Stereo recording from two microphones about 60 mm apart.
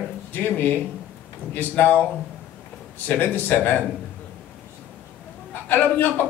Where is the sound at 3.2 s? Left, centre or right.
Left.